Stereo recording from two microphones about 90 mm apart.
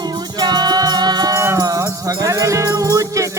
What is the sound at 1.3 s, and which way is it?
Music, 30° right (ahead or behind).